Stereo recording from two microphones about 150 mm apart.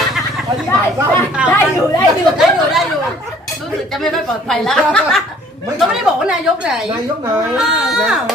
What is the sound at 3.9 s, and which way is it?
Speech, centre (ahead or behind).